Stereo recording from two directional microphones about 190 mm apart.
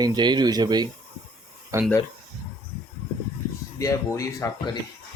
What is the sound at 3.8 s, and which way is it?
Speech, 15° left (ahead or behind).